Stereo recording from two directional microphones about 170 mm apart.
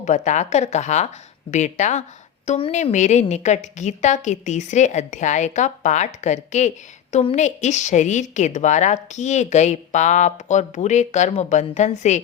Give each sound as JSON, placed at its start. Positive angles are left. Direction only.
{"t": 0.0, "sound": "a woman's voice", "side_deg": 45}